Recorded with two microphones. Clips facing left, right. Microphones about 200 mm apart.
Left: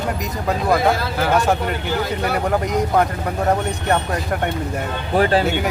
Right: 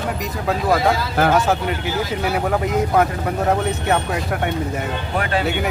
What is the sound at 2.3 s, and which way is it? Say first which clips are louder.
Speech: even; centre (ahead or behind).